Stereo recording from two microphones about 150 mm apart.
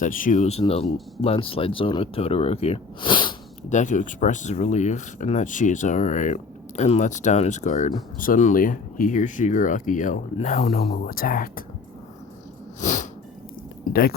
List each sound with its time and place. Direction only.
0.0 s speech: 60° left (ahead or behind); by 3.3 s 35° left (ahead or behind)
3.7 s speech: 55° left (ahead or behind)
11.1 s speech: 75° left (ahead or behind)
12.8 s sneeze: 55° left (ahead or behind)